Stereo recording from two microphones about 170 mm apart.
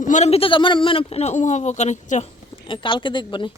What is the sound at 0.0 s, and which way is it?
A man's voice, 45° left (ahead or behind).